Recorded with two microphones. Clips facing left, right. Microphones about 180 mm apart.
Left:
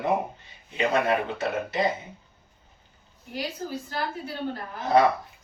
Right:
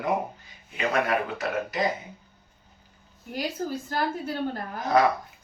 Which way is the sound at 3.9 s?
50° right (ahead or behind).